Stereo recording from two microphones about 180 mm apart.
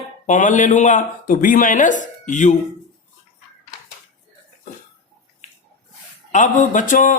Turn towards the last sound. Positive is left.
turn(degrees=45)  # may be behind; listen again after turning